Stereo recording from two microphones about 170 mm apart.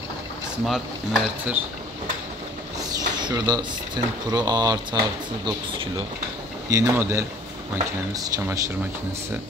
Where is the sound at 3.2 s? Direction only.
25° right (ahead or behind).